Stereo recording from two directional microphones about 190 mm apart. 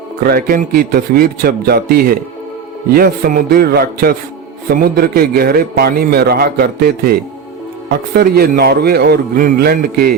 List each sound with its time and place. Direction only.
0.3 s a man's voice: 50° right (ahead or behind)